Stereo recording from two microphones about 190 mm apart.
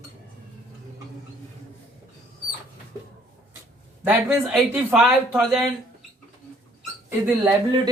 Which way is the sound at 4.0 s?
5° right (ahead or behind).